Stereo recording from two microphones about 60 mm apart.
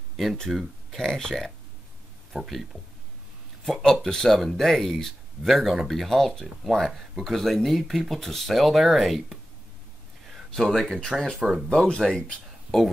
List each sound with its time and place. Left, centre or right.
0.5 s speech: centre
3.6 s speech: centre
10.5 s speech: centre
11.3 s speech: centre
11.7 s speech: centre